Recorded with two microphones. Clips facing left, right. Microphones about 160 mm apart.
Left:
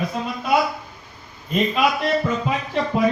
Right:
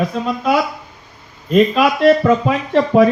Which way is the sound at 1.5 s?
85° right.